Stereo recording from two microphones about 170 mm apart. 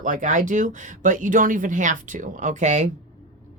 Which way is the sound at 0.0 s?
50° right (ahead or behind).